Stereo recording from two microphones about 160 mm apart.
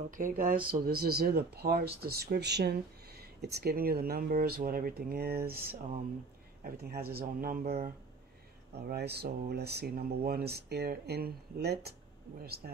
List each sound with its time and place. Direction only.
0.1 s speech: 55° right (ahead or behind); by 7.9 s 70° right (ahead or behind)
8.7 s speech: 90° right